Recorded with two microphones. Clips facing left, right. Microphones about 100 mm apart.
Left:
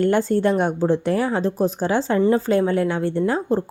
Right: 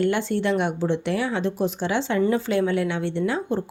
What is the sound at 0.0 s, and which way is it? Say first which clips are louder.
Speech: left 4 dB; 40° left (ahead or behind).